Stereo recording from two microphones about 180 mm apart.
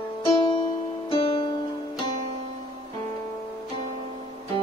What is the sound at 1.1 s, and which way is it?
Music, 30° left (ahead or behind).